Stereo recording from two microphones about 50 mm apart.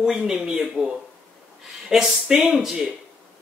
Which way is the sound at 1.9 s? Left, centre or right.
Centre.